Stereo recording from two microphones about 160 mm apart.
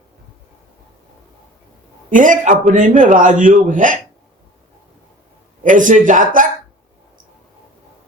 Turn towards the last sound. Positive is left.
turn(degrees=-55)  # may be behind; listen again after turning